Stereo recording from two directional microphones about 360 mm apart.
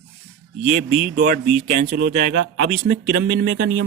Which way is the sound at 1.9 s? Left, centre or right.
Right.